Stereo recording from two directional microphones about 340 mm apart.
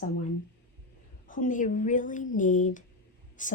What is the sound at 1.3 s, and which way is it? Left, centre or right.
Speech, left.